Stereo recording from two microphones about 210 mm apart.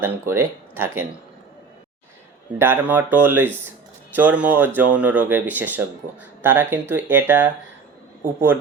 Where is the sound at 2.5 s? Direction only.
10° right (ahead or behind).